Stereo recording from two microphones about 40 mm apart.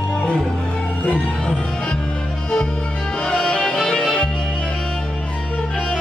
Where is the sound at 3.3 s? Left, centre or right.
Centre.